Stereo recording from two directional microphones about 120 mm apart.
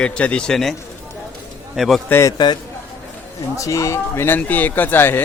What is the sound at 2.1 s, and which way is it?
Speech, 25° left (ahead or behind).